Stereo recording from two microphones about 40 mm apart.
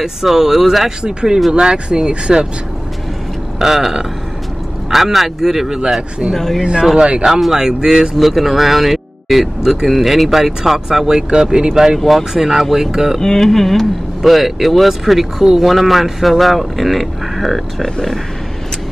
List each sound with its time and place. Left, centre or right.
0.0 s speech: centre
3.5 s speech: centre
6.3 s speech: centre
6.6 s speech: right
7.2 s speech: centre
8.3 s speech: centre
9.6 s speech: centre
9.8 s speech: centre
13.2 s a sound: centre
13.5 s speech: centre